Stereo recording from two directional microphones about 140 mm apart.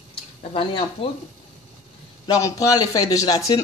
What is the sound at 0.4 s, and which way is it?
Speech, 45° left (ahead or behind).